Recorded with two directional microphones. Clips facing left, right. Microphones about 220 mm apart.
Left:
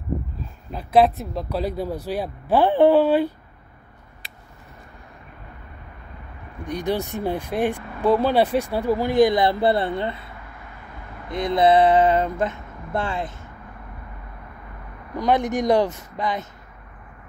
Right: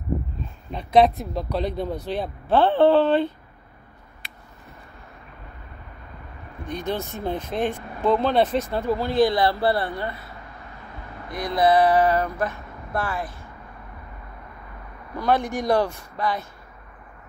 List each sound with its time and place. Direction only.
0.7 s speech: 5° left (ahead or behind)
6.6 s speech: 15° left (ahead or behind)
15.1 s speech: 15° left (ahead or behind)